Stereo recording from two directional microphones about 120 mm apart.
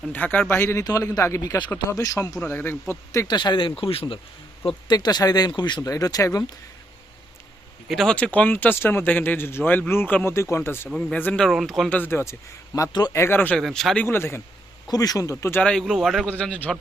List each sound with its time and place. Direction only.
0.1 s speech: 15° left (ahead or behind); by 2.3 s 30° left (ahead or behind)
2.4 s speech: 15° left (ahead or behind)
3.2 s speech: 40° left (ahead or behind)
4.6 s speech: 35° left (ahead or behind)
7.9 s speech: 5° left (ahead or behind); by 10.8 s 20° left (ahead or behind)
10.8 s speech: 5° left (ahead or behind)
11.9 s speech: 15° left (ahead or behind)
12.9 s speech: 35° left (ahead or behind)
13.1 s speech: 20° left (ahead or behind)
13.6 s speech: centre (ahead or behind)
14.0 s speech: 20° left (ahead or behind)
14.8 s speech: 30° left (ahead or behind)
15.6 s speech: 5° left (ahead or behind)
16.4 s speech: 10° left (ahead or behind)